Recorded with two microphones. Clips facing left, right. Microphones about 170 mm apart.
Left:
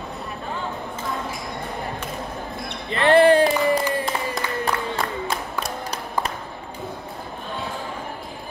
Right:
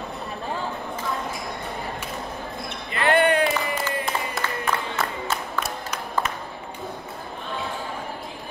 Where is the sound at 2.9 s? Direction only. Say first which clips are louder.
Left 5 dB; 30° left (ahead or behind).